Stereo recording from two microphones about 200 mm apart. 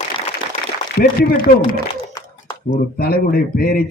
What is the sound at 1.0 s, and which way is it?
Speech, 45° left (ahead or behind).